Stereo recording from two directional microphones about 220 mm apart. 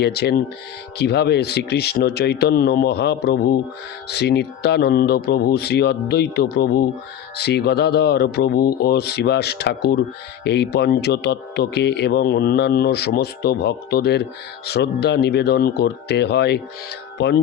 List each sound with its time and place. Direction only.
0.0 s speech: 50° left (ahead or behind)